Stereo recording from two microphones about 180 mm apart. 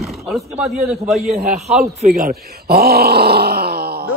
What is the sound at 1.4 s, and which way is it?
Speech, 40° right (ahead or behind).